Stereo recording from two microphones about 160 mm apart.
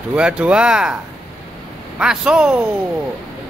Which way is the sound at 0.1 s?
5° right (ahead or behind).